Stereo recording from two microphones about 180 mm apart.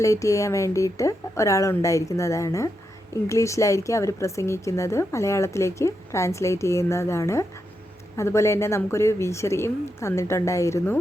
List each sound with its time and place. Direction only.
0.0 s a woman's voice: 15° left (ahead or behind)